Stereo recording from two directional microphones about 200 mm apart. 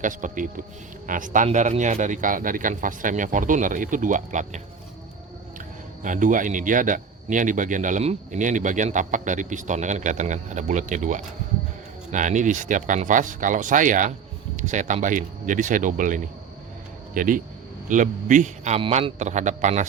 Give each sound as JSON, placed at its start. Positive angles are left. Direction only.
{"t": 0.0, "sound": "a man's voice", "side_deg": -40}
{"t": 6.0, "sound": "a man's voice", "side_deg": -40}